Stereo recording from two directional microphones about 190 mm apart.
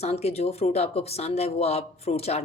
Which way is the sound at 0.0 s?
35° left (ahead or behind).